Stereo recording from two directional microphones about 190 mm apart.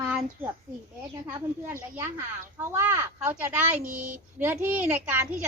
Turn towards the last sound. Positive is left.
turn(degrees=-10)  # may be behind; listen again after turning